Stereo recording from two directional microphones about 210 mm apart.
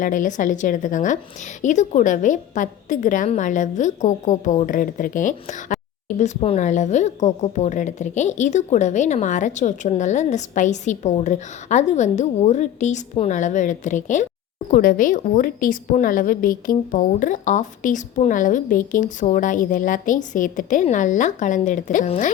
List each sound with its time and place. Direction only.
0.0 s a woman's voice: 40° left (ahead or behind)